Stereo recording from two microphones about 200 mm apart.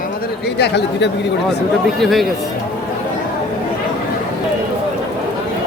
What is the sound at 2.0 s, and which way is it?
Speech, centre (ahead or behind).